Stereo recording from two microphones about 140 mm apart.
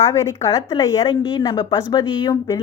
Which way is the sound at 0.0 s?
20° left (ahead or behind).